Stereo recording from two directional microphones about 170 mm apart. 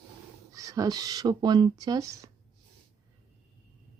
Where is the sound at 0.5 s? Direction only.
20° right (ahead or behind).